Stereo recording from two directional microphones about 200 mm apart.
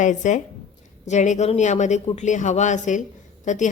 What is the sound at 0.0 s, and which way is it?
A woman's voice, 35° left (ahead or behind).